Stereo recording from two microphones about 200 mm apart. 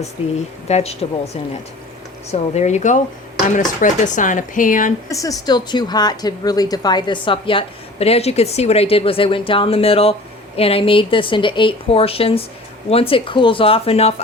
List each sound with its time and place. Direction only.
0.7 s speech: 30° left (ahead or behind)
2.3 s speech: 35° left (ahead or behind)
5.0 s a woman's voice: 15° left (ahead or behind)